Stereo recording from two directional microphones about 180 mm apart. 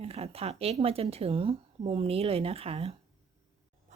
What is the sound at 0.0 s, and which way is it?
Speech, 35° right (ahead or behind).